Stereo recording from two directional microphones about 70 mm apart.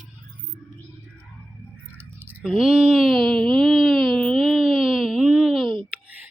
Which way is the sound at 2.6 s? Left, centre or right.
Centre.